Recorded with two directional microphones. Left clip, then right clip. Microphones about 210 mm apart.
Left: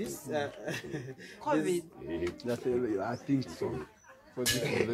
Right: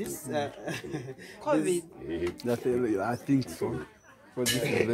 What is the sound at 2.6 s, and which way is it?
Speech, 40° right (ahead or behind).